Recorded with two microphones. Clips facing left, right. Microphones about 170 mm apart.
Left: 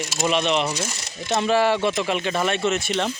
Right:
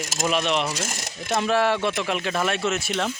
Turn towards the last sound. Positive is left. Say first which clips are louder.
# left 2 dB
turn(degrees=0)  # may be behind; listen again after turning